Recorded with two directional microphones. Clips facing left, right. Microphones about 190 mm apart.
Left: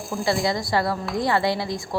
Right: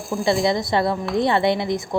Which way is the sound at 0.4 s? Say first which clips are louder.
Right 3 dB; 20° right (ahead or behind).